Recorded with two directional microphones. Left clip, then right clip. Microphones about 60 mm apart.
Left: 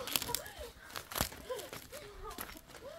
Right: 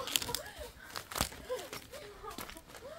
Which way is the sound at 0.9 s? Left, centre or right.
Centre.